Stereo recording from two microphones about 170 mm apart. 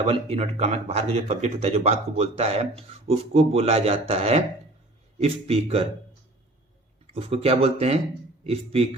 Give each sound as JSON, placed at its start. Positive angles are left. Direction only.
{"t": 0.1, "sound": "speech", "side_deg": -35}
{"t": 7.1, "sound": "speech", "side_deg": -35}